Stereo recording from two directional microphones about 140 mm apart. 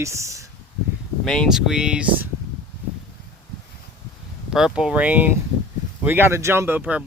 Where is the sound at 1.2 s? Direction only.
Centre (ahead or behind).